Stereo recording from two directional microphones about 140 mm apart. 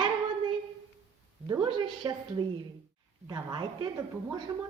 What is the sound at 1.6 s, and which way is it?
A woman's voice, 35° right (ahead or behind).